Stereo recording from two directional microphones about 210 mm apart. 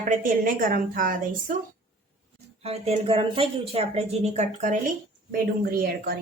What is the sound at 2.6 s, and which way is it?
Speech, 30° right (ahead or behind).